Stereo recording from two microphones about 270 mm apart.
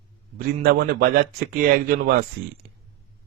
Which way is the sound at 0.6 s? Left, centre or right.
Right.